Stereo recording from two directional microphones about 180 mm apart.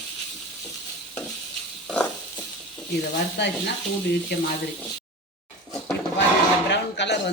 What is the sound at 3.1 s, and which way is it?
Speech, 65° left (ahead or behind).